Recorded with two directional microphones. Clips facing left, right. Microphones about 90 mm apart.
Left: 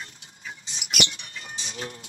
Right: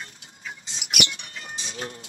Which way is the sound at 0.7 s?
30° right (ahead or behind).